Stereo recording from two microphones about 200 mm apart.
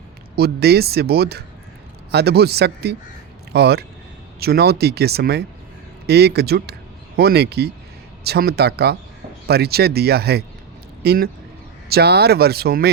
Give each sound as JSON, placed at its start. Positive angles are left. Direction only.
{"t": 0.3, "sound": "speech", "side_deg": -50}